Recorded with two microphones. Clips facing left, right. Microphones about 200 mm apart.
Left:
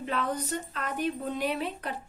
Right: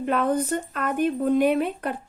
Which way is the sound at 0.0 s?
50° right (ahead or behind).